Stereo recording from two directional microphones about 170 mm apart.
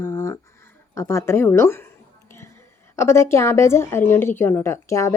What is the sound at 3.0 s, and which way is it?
A woman's voice, 15° left (ahead or behind).